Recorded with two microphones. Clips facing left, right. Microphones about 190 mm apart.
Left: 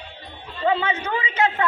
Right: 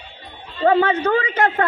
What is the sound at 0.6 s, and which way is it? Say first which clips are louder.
A woman's voice: right 7 dB; 50° right (ahead or behind).